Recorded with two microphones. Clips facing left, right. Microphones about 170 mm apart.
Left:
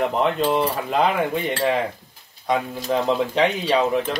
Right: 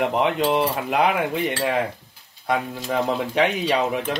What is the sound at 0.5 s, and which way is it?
Speech, 15° right (ahead or behind).